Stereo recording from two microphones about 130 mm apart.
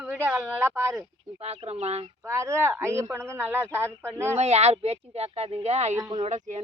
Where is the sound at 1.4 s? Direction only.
55° right (ahead or behind).